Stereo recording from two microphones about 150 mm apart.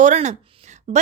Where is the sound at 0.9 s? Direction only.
40° right (ahead or behind).